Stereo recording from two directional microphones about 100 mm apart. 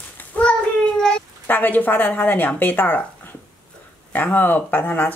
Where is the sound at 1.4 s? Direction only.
20° left (ahead or behind).